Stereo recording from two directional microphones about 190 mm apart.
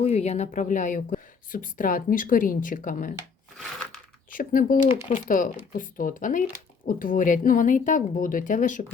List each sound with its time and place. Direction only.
0.0 s a woman's voice: 35° left (ahead or behind)
4.3 s a woman's voice: 45° left (ahead or behind)
4.9 s speech: 30° left (ahead or behind)
5.3 s a woman's voice: 45° left (ahead or behind)